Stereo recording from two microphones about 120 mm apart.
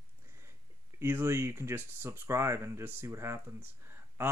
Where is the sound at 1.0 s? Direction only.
20° right (ahead or behind).